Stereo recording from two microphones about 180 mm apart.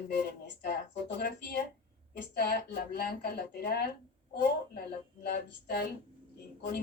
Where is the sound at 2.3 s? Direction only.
60° left (ahead or behind).